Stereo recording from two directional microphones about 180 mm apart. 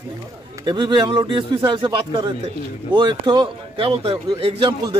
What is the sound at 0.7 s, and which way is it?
A man's voice, 25° right (ahead or behind).